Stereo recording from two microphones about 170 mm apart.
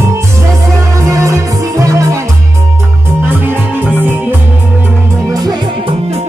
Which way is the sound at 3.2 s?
10° right (ahead or behind).